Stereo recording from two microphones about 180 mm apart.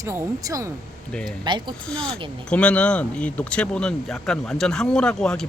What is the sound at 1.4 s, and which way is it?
Speech, 25° right (ahead or behind).